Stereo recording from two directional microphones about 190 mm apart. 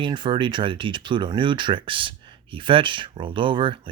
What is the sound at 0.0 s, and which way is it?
Speech, 25° right (ahead or behind).